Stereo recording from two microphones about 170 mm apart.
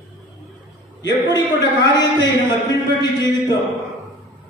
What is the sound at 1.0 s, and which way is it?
A man's voice, 25° left (ahead or behind).